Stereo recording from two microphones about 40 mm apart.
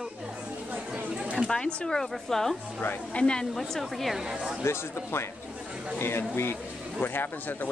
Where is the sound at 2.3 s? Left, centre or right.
Centre.